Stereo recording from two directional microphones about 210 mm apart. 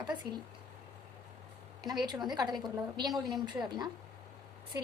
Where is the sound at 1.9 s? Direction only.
20° right (ahead or behind).